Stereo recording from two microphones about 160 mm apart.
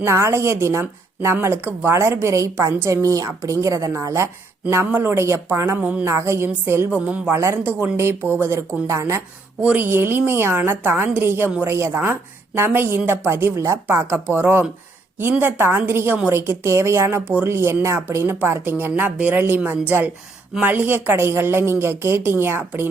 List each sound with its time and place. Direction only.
0.0 s a woman's voice: 15° right (ahead or behind)